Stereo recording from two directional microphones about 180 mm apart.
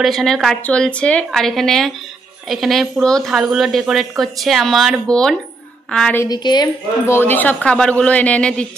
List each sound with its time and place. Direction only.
0.0 s speech: centre (ahead or behind)
6.2 s a woman's voice: 25° left (ahead or behind)
7.2 s speech: 10° left (ahead or behind)